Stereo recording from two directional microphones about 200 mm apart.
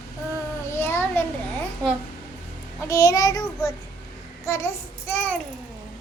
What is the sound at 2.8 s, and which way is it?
Child singing, 15° left (ahead or behind).